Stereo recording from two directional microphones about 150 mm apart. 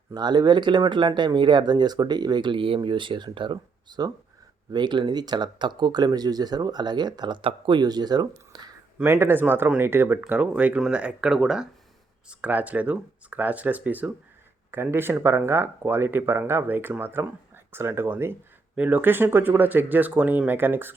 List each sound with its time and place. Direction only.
0.1 s speech: 30° right (ahead or behind)
9.0 s speech: 15° right (ahead or behind)